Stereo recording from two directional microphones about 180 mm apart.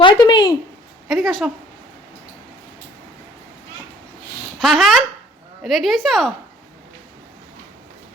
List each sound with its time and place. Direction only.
0.0 s a sound: 25° left (ahead or behind)
1.0 s a woman's voice: centre (ahead or behind)
4.6 s a woman's voice: centre (ahead or behind)